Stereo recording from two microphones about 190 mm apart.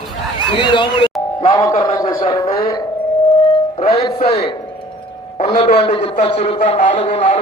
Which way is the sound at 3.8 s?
35° left (ahead or behind).